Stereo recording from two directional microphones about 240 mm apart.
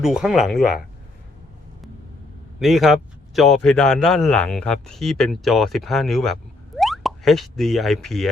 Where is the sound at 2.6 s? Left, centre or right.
Centre.